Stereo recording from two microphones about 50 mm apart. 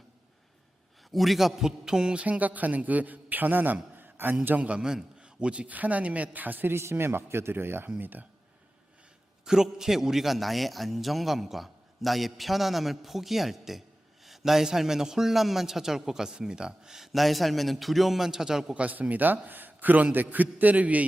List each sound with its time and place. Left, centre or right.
1.1 s a man's voice: centre
2.4 s a man's voice: right
4.4 s speech: right
4.8 s speech: centre; by 6.7 s right
6.7 s a man's voice: right
9.4 s a man's voice: centre
18.7 s a man's voice: right